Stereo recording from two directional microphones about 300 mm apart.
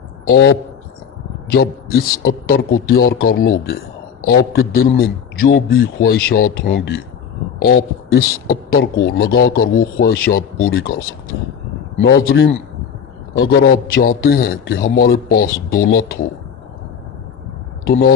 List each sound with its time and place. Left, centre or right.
0.3 s a man's voice: left
12.0 s a man's voice: left
17.8 s speech: left